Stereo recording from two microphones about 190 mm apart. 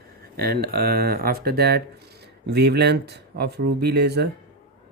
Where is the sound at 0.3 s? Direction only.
55° right (ahead or behind).